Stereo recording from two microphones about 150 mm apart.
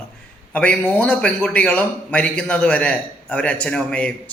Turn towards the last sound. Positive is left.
turn(degrees=5)  # may be behind; listen again after turning